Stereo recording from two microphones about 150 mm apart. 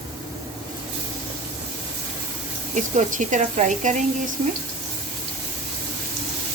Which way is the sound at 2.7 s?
55° right (ahead or behind).